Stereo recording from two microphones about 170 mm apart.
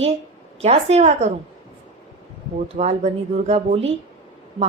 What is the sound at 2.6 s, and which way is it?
A woman's voice, 40° right (ahead or behind).